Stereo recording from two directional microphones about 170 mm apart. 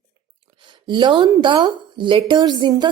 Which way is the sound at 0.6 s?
30° right (ahead or behind).